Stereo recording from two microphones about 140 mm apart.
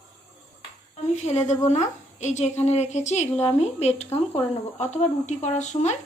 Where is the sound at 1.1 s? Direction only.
50° left (ahead or behind).